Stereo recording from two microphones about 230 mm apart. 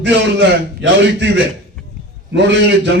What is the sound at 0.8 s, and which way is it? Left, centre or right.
Music, right.